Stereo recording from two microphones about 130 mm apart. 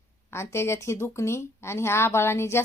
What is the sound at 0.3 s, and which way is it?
A woman's voice, 20° left (ahead or behind).